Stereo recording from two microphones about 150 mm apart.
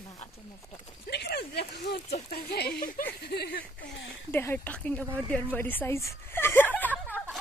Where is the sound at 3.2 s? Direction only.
90° left.